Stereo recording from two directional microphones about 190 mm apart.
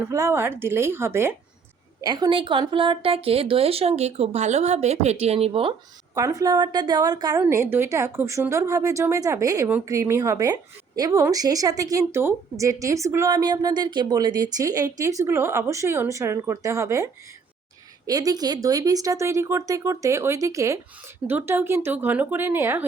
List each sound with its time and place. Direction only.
0.1 s a woman's voice: 15° right (ahead or behind); by 5.7 s 30° right (ahead or behind)
6.1 s a woman's voice: 15° right (ahead or behind)